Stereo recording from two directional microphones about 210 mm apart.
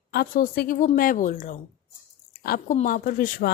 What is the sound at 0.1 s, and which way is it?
Speech, 45° left (ahead or behind).